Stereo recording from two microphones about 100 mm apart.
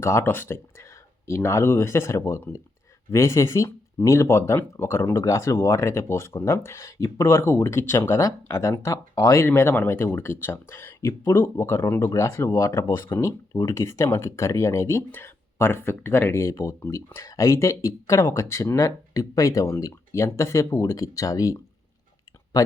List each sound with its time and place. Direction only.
0.0 s speech: 25° left (ahead or behind)